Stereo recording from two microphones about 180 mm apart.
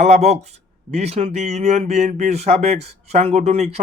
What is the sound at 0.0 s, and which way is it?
Speech, 40° right (ahead or behind).